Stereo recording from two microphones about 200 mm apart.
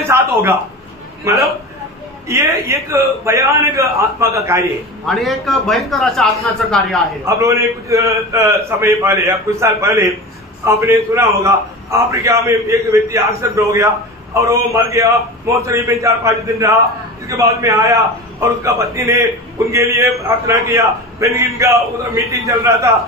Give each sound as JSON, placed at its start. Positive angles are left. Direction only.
{"t": 0.0, "sound": "a sound", "side_deg": -10}
{"t": 1.2, "sound": "a man's voice", "side_deg": -15}
{"t": 5.0, "sound": "a man's voice", "side_deg": 0}
{"t": 7.2, "sound": "a man's voice", "side_deg": -15}